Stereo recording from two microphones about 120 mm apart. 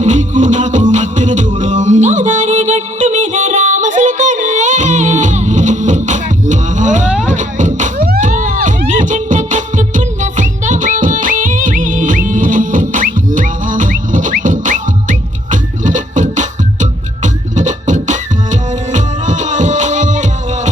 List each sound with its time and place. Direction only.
0.0 s music: 90° right